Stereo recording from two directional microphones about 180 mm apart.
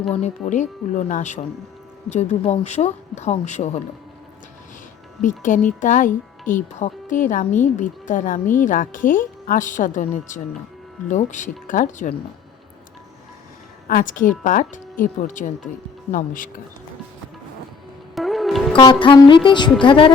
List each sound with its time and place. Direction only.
0.1 s speech: 40° left (ahead or behind)
5.2 s a woman's voice: 45° left (ahead or behind)
13.8 s a woman's voice: 50° left (ahead or behind)
18.1 s music: centre (ahead or behind)
18.8 s music: 25° left (ahead or behind)